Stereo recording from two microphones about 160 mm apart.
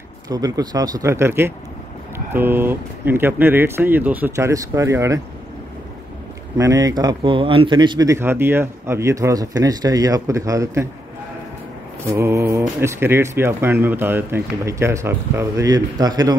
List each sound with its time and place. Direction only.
0.3 s speech: 25° right (ahead or behind)
6.6 s speech: 20° right (ahead or behind)
12.1 s speech: 15° right (ahead or behind)